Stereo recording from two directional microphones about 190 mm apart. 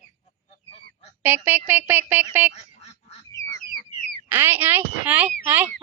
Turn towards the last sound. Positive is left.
turn(degrees=-10)  # may be behind; listen again after turning